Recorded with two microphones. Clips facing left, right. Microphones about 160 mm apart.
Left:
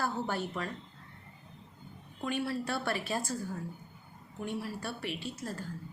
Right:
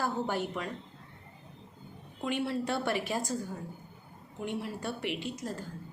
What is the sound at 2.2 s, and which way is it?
A woman's voice, 20° right (ahead or behind).